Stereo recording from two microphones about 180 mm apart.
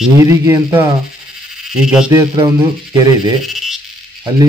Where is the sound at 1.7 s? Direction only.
5° right (ahead or behind).